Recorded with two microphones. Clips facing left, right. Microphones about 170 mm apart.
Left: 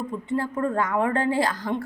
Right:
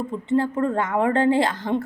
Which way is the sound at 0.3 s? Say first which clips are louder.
Right 5 dB; 25° right (ahead or behind).